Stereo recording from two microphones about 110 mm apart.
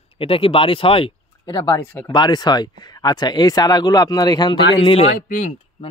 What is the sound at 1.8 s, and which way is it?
Speech, 20° left (ahead or behind).